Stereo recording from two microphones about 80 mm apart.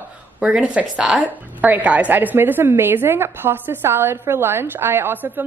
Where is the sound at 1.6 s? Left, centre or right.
Centre.